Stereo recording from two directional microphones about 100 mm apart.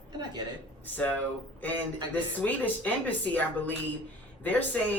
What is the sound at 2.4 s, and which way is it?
A woman's voice, 15° left (ahead or behind).